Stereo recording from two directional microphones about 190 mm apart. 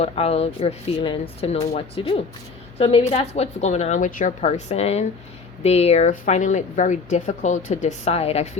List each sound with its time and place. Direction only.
0.0 s a woman's voice: 35° left (ahead or behind)